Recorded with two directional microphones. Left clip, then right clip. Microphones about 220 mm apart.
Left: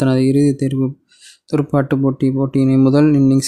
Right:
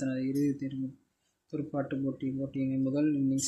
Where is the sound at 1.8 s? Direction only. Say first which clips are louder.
Left 17 dB; 40° left (ahead or behind).